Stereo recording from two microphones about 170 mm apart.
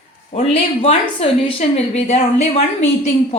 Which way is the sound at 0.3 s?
40° left (ahead or behind).